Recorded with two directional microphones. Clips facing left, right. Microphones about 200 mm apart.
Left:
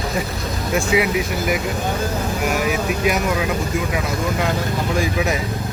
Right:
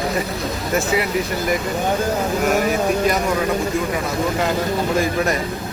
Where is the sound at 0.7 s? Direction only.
Centre (ahead or behind).